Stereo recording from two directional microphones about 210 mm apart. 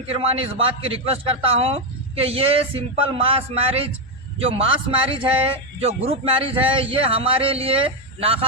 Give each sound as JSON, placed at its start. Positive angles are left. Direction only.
{"t": 0.1, "sound": "a man's voice", "side_deg": -30}